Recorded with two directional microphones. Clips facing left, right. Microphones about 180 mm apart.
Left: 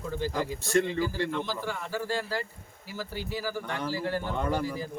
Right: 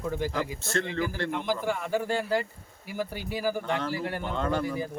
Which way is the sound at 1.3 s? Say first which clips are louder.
Right 4 dB; 15° right (ahead or behind).